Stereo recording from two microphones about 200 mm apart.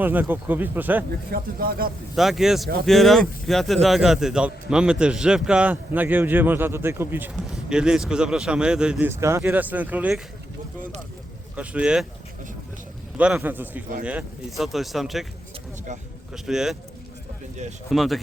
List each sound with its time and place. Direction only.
0.0 s speech: 10° right (ahead or behind)
1.3 s speech: 45° right (ahead or behind)
2.1 s a man's voice: centre (ahead or behind)
11.5 s a man's voice: 5° right (ahead or behind)
13.1 s a man's voice: 5° right (ahead or behind)
16.3 s a man's voice: 5° right (ahead or behind)
17.8 s a man's voice: centre (ahead or behind)